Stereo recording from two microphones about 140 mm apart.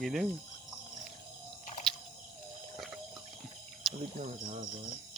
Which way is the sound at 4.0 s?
60° right (ahead or behind).